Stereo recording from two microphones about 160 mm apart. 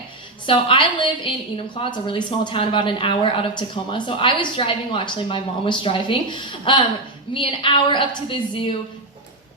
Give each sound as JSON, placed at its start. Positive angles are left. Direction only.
{"t": 0.4, "sound": "a woman's voice", "side_deg": 30}